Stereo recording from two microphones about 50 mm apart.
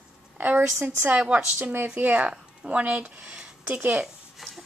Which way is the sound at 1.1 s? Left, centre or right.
Right.